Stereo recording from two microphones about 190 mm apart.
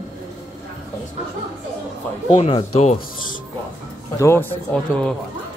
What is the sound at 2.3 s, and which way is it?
Speech, 30° left (ahead or behind).